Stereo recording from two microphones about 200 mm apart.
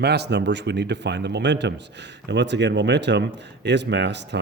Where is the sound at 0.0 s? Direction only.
55° right (ahead or behind).